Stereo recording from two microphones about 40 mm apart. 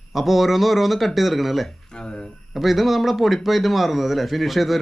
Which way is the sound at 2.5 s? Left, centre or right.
Centre.